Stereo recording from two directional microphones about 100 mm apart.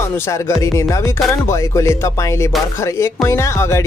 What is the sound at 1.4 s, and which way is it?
Speech, 30° left (ahead or behind).